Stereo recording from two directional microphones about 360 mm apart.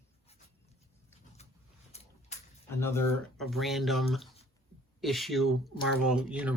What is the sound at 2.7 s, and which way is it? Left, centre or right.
Speech, centre.